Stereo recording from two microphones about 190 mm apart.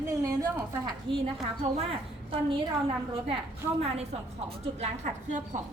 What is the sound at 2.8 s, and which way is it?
Speech, 30° right (ahead or behind).